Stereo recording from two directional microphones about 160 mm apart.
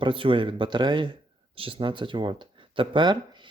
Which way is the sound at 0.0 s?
30° right (ahead or behind).